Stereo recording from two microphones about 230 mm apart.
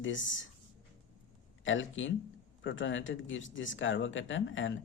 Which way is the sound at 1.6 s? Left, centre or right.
Left.